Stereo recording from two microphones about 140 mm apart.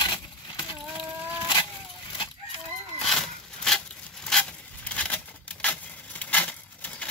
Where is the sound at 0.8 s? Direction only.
5° right (ahead or behind).